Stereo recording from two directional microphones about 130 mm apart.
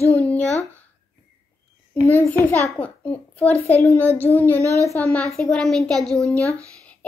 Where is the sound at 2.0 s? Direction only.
15° left (ahead or behind).